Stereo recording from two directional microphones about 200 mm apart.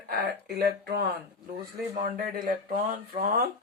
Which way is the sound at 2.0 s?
45° right (ahead or behind).